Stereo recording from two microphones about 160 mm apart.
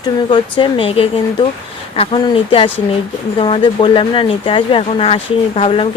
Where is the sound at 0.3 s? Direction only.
30° left (ahead or behind).